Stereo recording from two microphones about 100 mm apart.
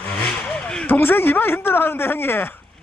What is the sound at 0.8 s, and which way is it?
Speech, 20° left (ahead or behind).